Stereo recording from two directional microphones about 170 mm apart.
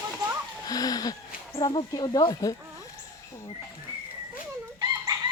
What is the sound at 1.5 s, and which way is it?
Speech, 30° left (ahead or behind).